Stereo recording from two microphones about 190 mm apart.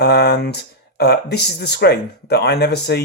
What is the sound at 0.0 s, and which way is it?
Speech, 60° left (ahead or behind).